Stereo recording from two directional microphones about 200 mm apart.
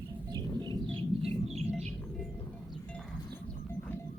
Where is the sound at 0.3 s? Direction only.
20° right (ahead or behind).